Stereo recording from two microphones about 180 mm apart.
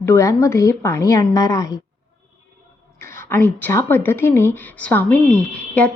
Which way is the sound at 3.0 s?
15° left (ahead or behind).